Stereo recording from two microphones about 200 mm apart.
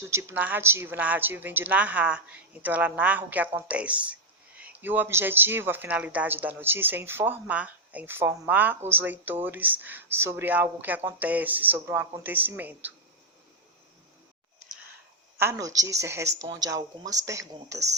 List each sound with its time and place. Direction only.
0.1 s speech: 15° right (ahead or behind)
15.4 s speech: 15° right (ahead or behind)